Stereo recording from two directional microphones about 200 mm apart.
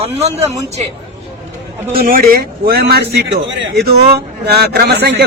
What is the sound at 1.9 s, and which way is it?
A man's voice, 50° right (ahead or behind).